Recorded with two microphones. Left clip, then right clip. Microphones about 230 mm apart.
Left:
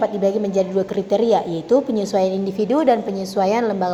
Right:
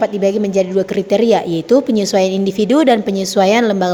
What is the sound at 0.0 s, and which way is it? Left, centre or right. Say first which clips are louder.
A woman's voice: right 4 dB; right.